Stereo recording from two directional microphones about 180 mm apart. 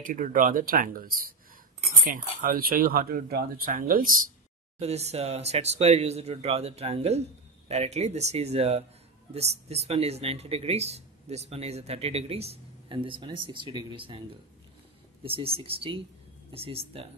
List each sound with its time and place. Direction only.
0.0 s speech: 50° right (ahead or behind)
4.7 s speech: 35° right (ahead or behind)
15.2 s speech: 30° right (ahead or behind)